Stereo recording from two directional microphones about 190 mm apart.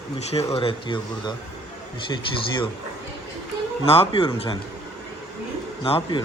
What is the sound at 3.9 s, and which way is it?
Speech, 30° left (ahead or behind).